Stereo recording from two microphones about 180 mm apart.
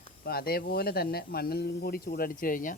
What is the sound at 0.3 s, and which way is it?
Speech, 60° left (ahead or behind).